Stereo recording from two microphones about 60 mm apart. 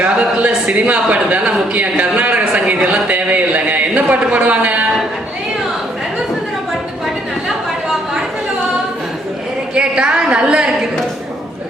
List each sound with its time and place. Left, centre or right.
0.0 s speech: centre
9.7 s a woman's voice: centre